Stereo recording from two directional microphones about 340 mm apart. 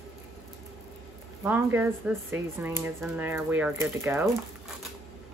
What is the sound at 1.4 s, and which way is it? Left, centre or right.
Speech, centre.